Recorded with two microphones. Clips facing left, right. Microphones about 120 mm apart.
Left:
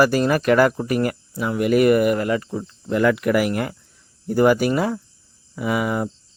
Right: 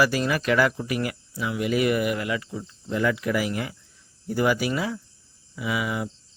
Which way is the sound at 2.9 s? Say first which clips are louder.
Left 6 dB; 60° left (ahead or behind).